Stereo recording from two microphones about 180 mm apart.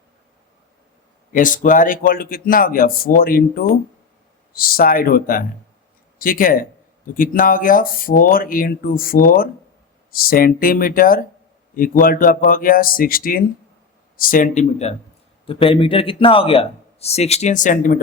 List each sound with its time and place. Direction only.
1.3 s speech: 45° left (ahead or behind)